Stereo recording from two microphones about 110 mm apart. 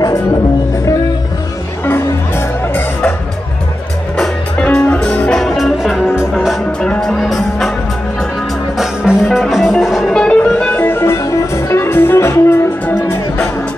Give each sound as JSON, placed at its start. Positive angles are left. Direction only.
{"t": 0.0, "sound": "music", "side_deg": 35}
{"t": 1.9, "sound": "music", "side_deg": 20}
{"t": 4.2, "sound": "music", "side_deg": 10}
{"t": 8.7, "sound": "music", "side_deg": -5}